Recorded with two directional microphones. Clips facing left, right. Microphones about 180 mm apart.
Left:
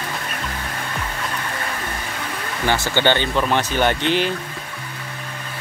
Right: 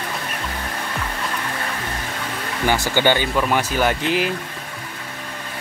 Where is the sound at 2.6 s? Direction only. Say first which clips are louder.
Right 1 dB; 10° right (ahead or behind).